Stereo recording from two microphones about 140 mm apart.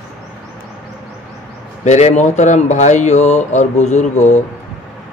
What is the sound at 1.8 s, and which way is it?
A man's voice, 55° left (ahead or behind).